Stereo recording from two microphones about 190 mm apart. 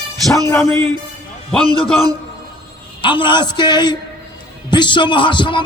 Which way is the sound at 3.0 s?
25° left (ahead or behind).